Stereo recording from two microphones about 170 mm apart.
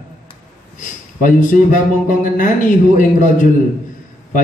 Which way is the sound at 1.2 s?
50° left (ahead or behind).